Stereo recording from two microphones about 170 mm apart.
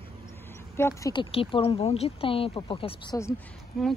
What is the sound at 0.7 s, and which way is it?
Speech, 15° left (ahead or behind).